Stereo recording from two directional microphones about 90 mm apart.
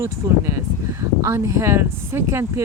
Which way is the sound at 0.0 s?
30° right (ahead or behind).